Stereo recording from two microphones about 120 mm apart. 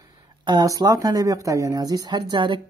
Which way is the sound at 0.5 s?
35° right (ahead or behind).